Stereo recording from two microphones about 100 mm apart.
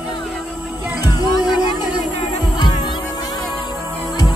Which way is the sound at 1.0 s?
40° left (ahead or behind).